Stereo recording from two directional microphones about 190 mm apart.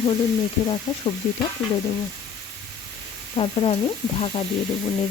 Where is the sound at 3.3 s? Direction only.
30° left (ahead or behind).